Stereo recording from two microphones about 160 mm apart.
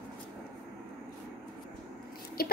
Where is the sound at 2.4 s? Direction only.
70° left (ahead or behind).